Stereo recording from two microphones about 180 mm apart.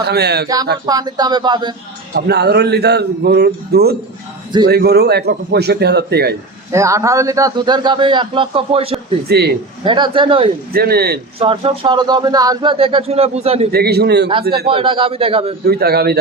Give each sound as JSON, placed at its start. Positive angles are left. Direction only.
{"t": 0.0, "sound": "a man's voice", "side_deg": -65}
{"t": 0.4, "sound": "a man's voice", "side_deg": -20}
{"t": 2.1, "sound": "a man's voice", "side_deg": -65}
{"t": 6.7, "sound": "a man's voice", "side_deg": -15}
{"t": 9.3, "sound": "a man's voice", "side_deg": -65}
{"t": 9.8, "sound": "a man's voice", "side_deg": -25}
{"t": 10.7, "sound": "a man's voice", "side_deg": -60}
{"t": 11.3, "sound": "a man's voice", "side_deg": -30}
{"t": 12.7, "sound": "speech", "side_deg": -30}
{"t": 13.7, "sound": "a man's voice", "side_deg": -60}
{"t": 14.7, "sound": "a man's voice", "side_deg": -30}
{"t": 15.6, "sound": "a man's voice", "side_deg": -60}